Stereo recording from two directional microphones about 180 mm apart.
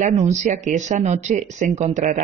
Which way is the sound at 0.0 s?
40° right (ahead or behind).